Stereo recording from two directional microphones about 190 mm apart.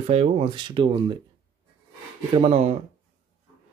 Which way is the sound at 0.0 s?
35° right (ahead or behind).